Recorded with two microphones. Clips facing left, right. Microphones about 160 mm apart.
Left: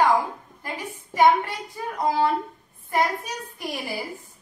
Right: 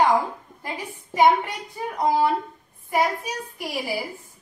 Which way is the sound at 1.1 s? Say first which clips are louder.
Even; 20° right (ahead or behind).